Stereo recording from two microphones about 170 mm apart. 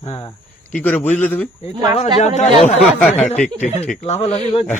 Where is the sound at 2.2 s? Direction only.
45° left (ahead or behind).